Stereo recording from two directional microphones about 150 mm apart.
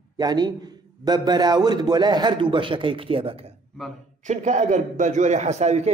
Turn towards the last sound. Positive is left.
turn(degrees=-50)  # may be behind; listen again after turning